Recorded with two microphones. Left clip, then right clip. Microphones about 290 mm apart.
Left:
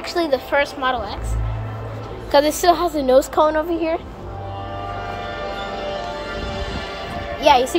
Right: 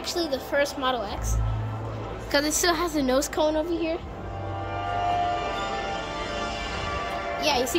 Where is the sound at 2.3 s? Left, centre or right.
Centre.